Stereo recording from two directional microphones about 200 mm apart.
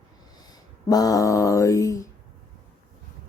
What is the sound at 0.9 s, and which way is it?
Speech, 20° left (ahead or behind).